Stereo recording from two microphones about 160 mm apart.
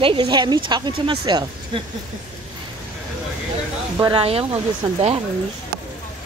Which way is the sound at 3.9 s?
30° right (ahead or behind).